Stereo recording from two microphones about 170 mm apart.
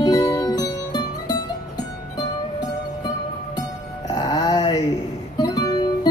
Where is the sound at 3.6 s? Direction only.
25° left (ahead or behind).